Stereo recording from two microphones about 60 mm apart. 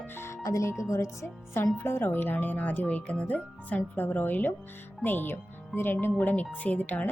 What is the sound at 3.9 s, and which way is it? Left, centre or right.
Speech, left.